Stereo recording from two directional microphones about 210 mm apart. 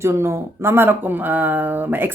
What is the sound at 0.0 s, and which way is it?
Speech, 10° right (ahead or behind).